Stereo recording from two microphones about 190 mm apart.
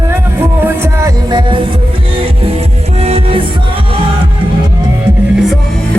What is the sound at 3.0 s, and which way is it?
Music, 30° right (ahead or behind).